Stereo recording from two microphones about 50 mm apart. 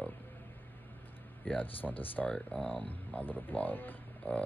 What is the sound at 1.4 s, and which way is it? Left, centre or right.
Speech, left.